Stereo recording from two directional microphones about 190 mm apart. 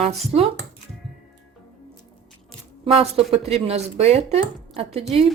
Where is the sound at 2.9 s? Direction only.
30° right (ahead or behind).